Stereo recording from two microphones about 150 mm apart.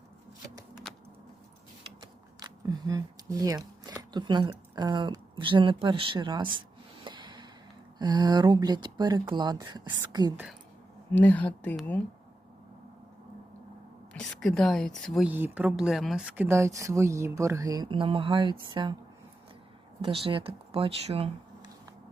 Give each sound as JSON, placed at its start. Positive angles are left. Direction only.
{"t": 2.0, "sound": "speech", "side_deg": -25}
{"t": 6.6, "sound": "snort", "side_deg": -30}
{"t": 7.9, "sound": "speech", "side_deg": -30}
{"t": 11.1, "sound": "speech", "side_deg": 10}
{"t": 14.1, "sound": "a woman's voice", "side_deg": 5}
{"t": 15.3, "sound": "speech", "side_deg": -15}
{"t": 16.5, "sound": "speech", "side_deg": -20}
{"t": 17.9, "sound": "speech", "side_deg": -35}
{"t": 20.0, "sound": "speech", "side_deg": -35}